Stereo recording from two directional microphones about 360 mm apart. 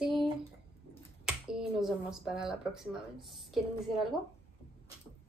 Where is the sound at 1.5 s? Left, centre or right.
Centre.